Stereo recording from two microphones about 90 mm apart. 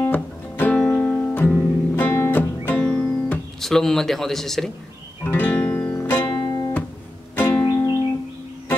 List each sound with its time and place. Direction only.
0.1 s music: 20° left (ahead or behind)
2.0 s guitar: 25° left (ahead or behind)
3.6 s a man's voice: 5° left (ahead or behind)
5.2 s music: 20° left (ahead or behind)
6.3 s guitar: 55° left (ahead or behind)
7.3 s music: 20° left (ahead or behind)
7.6 s music: 40° left (ahead or behind)